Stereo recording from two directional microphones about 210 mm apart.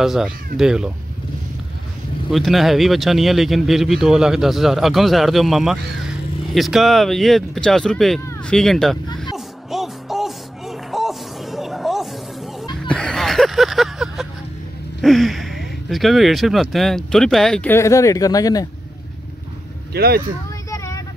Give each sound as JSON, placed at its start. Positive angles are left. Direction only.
{"t": 0.0, "sound": "speech", "side_deg": 0}
{"t": 2.3, "sound": "speech", "side_deg": 0}
{"t": 9.3, "sound": "music", "side_deg": 0}
{"t": 12.8, "sound": "a sound", "side_deg": 5}
{"t": 15.0, "sound": "speech", "side_deg": 0}
{"t": 19.9, "sound": "speech", "side_deg": -50}
{"t": 20.7, "sound": "vehicle", "side_deg": 15}